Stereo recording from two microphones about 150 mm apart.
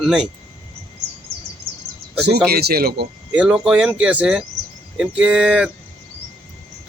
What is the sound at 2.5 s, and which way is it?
Speech, 90° right.